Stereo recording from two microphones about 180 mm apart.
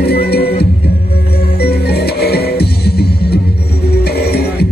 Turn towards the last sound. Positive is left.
turn(degrees=60)  # may be behind; listen again after turning